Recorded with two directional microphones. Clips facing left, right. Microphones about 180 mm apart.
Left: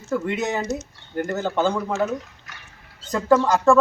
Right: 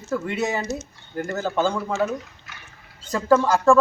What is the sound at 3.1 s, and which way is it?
Speech, centre (ahead or behind).